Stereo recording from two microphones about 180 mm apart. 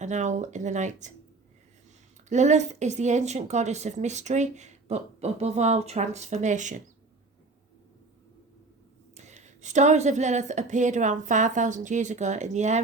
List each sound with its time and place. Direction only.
0.0 s a woman's voice: 40° right (ahead or behind)
2.3 s a woman's voice: 40° right (ahead or behind)
9.1 s a woman's voice: 40° right (ahead or behind)